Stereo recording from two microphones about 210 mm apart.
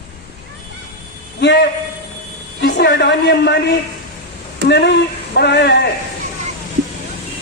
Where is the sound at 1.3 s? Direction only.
55° left (ahead or behind).